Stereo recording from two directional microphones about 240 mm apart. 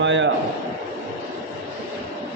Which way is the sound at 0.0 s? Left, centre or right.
Right.